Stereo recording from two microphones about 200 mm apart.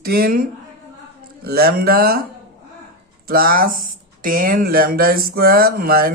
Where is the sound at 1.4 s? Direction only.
50° right (ahead or behind).